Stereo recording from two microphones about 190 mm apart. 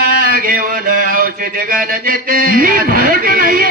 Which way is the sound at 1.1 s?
45° right (ahead or behind).